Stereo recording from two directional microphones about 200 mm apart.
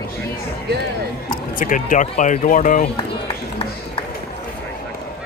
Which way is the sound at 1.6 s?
40° left (ahead or behind).